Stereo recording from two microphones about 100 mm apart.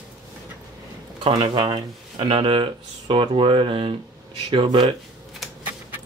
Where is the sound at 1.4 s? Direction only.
65° right (ahead or behind).